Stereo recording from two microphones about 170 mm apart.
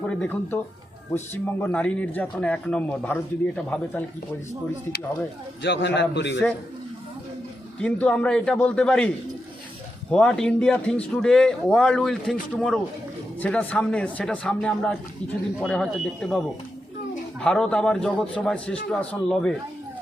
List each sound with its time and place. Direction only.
0.0 s speech: 5° left (ahead or behind)
5.6 s a man's voice: 90° left
7.8 s a man's voice: 10° left (ahead or behind)
17.4 s a man's voice: 5° left (ahead or behind)